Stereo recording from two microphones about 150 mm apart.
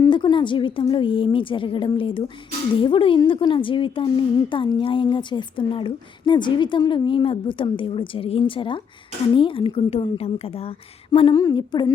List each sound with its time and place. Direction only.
0.0 s a woman's voice: 30° left (ahead or behind)